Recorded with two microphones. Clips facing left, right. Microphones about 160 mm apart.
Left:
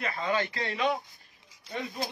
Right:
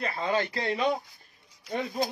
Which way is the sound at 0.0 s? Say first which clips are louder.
Right 2 dB; 35° right (ahead or behind).